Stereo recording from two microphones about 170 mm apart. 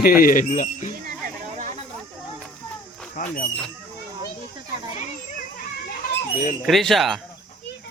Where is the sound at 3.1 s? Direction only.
55° left (ahead or behind).